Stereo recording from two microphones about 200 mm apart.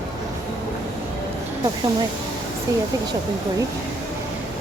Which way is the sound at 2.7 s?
20° right (ahead or behind).